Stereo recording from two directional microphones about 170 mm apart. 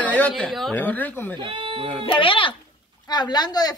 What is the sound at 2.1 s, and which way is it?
Speech, 30° left (ahead or behind).